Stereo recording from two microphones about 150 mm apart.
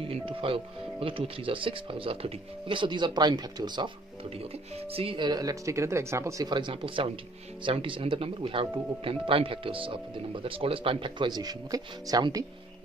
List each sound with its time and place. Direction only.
0.3 s speech: 35° right (ahead or behind)